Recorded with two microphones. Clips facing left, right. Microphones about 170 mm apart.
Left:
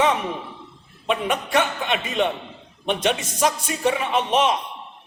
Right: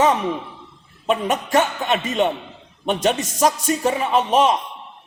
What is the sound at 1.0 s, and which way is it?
A man's voice, 45° right (ahead or behind).